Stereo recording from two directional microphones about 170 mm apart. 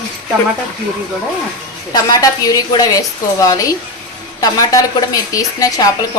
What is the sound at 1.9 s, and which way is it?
Speech, 20° left (ahead or behind).